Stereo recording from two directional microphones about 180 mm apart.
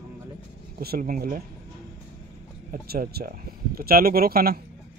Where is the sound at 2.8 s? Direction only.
60° right (ahead or behind).